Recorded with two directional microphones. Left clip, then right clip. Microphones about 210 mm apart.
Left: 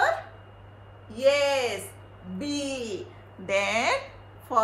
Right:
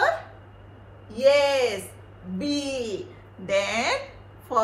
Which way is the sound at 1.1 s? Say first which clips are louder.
Right 3 dB; 5° left (ahead or behind).